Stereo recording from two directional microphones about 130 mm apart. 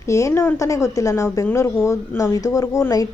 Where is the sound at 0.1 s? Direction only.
20° left (ahead or behind).